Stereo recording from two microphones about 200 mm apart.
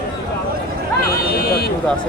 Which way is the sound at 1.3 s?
50° left (ahead or behind).